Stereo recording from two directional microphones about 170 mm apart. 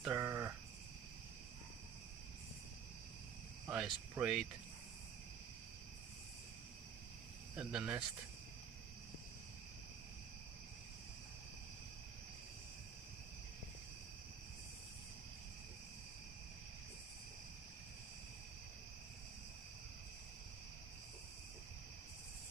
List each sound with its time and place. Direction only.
0.0 s sheep: 15° right (ahead or behind)
3.6 s cricket: 5° right (ahead or behind)
4.1 s speech: 5° right (ahead or behind)
7.5 s speech: 5° right (ahead or behind)